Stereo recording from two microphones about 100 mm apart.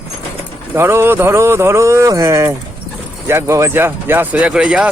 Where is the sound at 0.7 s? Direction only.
25° right (ahead or behind).